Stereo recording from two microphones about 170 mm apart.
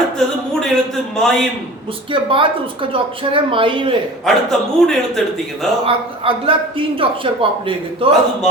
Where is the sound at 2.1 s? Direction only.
30° right (ahead or behind).